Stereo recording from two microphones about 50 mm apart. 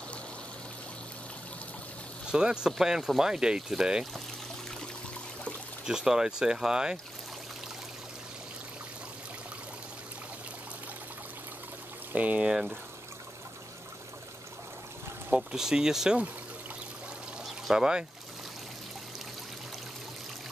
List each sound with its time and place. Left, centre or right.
2.3 s speech: centre
5.9 s speech: centre
12.1 s speech: right
12.4 s speech: centre
15.3 s speech: centre
17.6 s speech: centre